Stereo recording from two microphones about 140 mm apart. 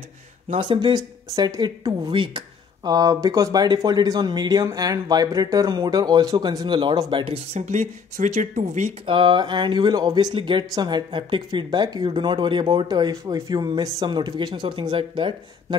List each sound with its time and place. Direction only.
0.6 s speech: 35° right (ahead or behind)
7.5 s speech: 55° right (ahead or behind)
9.0 s speech: 35° right (ahead or behind)